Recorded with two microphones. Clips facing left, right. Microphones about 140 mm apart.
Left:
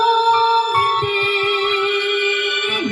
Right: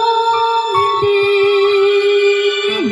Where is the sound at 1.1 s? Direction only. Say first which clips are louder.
Right 9 dB; 30° right (ahead or behind).